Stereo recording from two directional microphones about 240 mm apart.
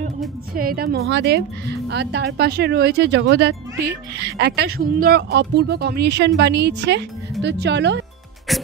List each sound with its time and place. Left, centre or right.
0.6 s speech: right
8.5 s music: centre